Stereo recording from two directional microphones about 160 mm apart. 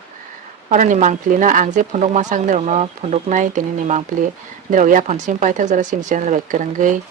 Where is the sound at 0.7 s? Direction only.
50° right (ahead or behind).